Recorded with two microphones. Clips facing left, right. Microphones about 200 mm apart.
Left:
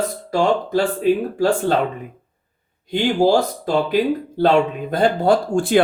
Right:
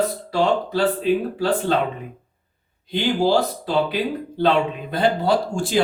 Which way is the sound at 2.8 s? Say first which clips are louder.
Left 3 dB; 50° left (ahead or behind).